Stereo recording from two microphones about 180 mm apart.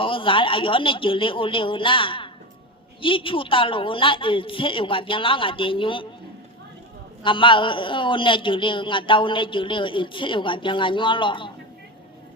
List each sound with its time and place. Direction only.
0.0 s a man's voice: 30° left (ahead or behind)
7.2 s a man's voice: 25° left (ahead or behind)